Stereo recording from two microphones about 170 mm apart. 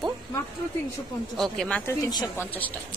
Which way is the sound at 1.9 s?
20° left (ahead or behind).